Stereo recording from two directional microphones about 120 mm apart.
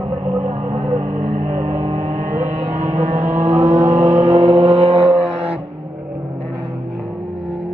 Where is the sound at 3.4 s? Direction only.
60° right (ahead or behind).